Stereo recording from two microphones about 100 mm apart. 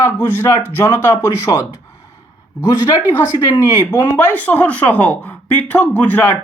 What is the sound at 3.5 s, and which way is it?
Speech, 30° left (ahead or behind).